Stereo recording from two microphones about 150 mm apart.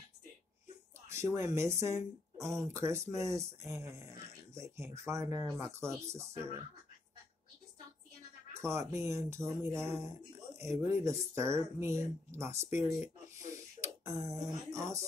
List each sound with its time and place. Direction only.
1.1 s speech: 20° right (ahead or behind)
8.5 s speech: 20° right (ahead or behind)